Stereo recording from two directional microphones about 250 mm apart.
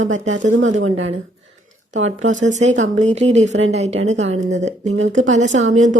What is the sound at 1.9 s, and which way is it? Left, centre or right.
Speech, right.